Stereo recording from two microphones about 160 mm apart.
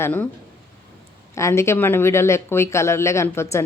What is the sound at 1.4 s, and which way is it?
Speech, 15° left (ahead or behind).